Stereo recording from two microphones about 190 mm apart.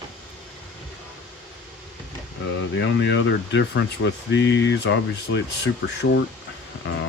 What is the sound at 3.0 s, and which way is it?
Speech, 70° left (ahead or behind).